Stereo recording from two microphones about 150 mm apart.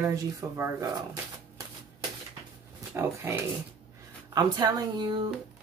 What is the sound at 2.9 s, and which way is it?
Speech, 15° right (ahead or behind).